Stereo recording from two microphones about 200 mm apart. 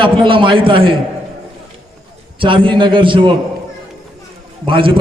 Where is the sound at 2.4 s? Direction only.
25° right (ahead or behind).